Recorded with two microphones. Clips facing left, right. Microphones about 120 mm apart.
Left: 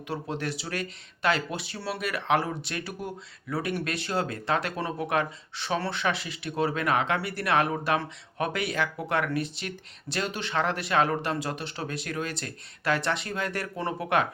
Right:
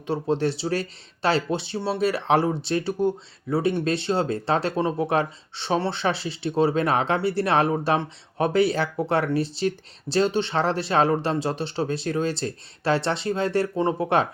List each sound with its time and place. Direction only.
0.1 s speech: 30° right (ahead or behind)